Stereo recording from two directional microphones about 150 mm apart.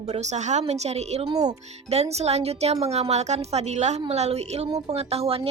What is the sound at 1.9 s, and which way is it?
A woman's voice, 45° right (ahead or behind).